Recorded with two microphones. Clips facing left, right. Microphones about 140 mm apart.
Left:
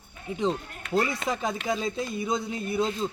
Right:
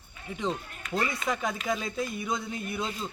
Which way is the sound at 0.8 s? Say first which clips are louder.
Left 7 dB; 65° left (ahead or behind).